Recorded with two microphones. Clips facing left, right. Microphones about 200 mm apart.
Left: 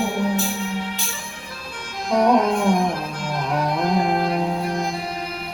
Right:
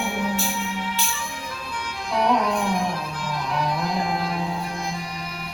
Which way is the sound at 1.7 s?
45° left (ahead or behind).